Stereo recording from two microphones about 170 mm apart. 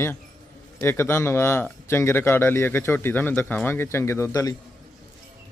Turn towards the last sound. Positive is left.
turn(degrees=20)  # may be behind; listen again after turning